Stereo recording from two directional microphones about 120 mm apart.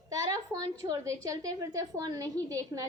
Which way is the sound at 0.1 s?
30° right (ahead or behind).